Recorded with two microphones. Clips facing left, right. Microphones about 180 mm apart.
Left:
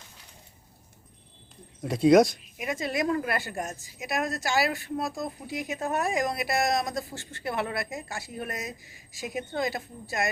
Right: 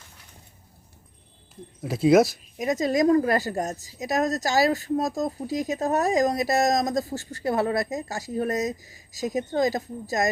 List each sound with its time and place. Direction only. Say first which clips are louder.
1.8 s speech: right 1 dB; centre (ahead or behind)
2.6 s a woman's voice: right 7 dB; 40° right (ahead or behind)